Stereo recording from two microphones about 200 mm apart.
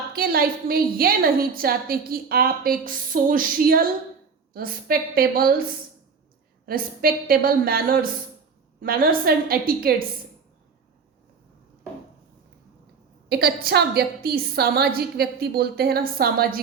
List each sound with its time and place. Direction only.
0.1 s a woman's voice: 50° right (ahead or behind)
6.7 s a woman's voice: 45° right (ahead or behind)
13.2 s a woman's voice: 55° right (ahead or behind)